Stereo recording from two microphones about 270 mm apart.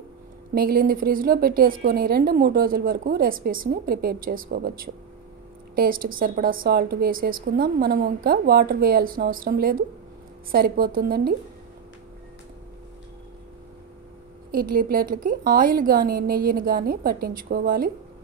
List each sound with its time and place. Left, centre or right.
0.6 s a woman's voice: right
14.5 s a woman's voice: right